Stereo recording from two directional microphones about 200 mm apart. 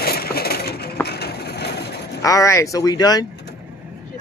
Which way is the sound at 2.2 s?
15° left (ahead or behind).